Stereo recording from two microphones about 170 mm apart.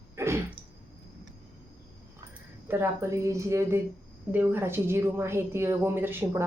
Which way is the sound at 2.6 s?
15° right (ahead or behind).